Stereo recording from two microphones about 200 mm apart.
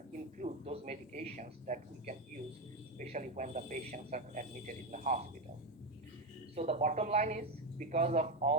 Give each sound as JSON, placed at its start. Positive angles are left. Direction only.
{"t": 0.3, "sound": "a man's voice", "side_deg": -35}
{"t": 6.6, "sound": "a man's voice", "side_deg": -35}